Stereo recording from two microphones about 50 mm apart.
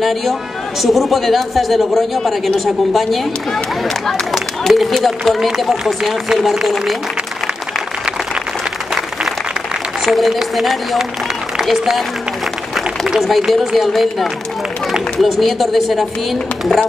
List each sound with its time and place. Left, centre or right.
0.0 s a man's voice: centre
10.0 s a man's voice: centre
12.7 s a sound: centre
13.5 s a man's voice: centre
15.1 s a man's voice: centre